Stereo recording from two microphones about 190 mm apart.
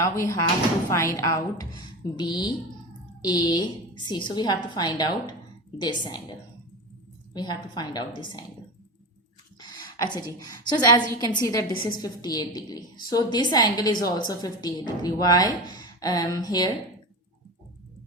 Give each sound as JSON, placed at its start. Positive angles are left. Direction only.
{"t": 0.0, "sound": "a woman's voice", "side_deg": 15}
{"t": 7.3, "sound": "a woman's voice", "side_deg": 25}
{"t": 10.0, "sound": "a woman's voice", "side_deg": 20}